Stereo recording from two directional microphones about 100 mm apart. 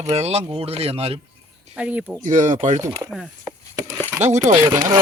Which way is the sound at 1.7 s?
15° right (ahead or behind).